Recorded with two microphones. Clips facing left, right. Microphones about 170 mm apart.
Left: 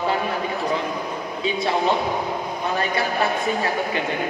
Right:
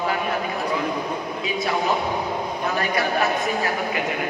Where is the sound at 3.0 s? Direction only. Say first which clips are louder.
Right 1 dB; 30° left (ahead or behind).